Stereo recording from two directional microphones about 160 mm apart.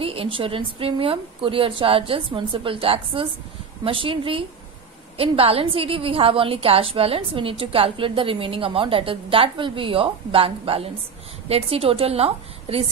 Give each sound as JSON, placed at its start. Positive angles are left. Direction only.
{"t": 0.0, "sound": "a woman's voice", "side_deg": -35}